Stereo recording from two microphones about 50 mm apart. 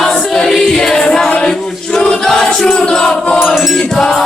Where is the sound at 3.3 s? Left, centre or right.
Centre.